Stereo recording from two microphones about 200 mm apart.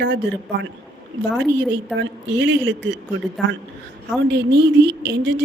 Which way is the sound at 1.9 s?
65° right (ahead or behind).